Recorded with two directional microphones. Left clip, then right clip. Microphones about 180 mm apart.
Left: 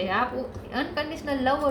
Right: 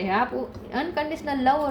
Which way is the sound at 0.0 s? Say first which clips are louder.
Right 2 dB; 45° right (ahead or behind).